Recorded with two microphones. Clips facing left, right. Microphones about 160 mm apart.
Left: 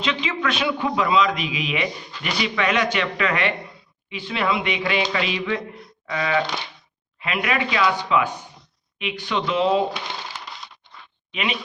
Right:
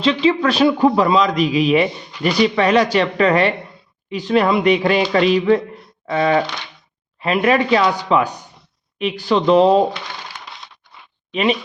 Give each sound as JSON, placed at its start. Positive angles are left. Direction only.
{"t": 0.0, "sound": "a man's voice", "side_deg": -30}
{"t": 11.3, "sound": "speech", "side_deg": -40}